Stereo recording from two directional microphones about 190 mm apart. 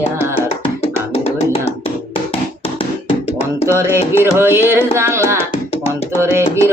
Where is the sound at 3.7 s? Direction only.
15° right (ahead or behind).